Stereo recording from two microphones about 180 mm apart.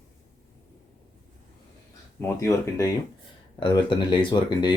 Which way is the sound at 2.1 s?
15° left (ahead or behind).